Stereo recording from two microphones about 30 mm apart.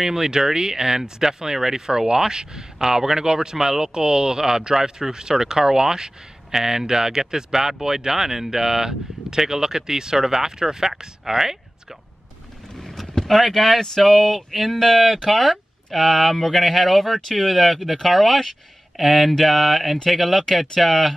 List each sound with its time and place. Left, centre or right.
0.0 s speech: centre
13.0 s vehicle: left
13.3 s speech: centre